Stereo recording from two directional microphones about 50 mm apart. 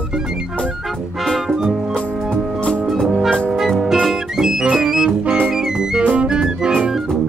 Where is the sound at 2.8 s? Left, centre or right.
Centre.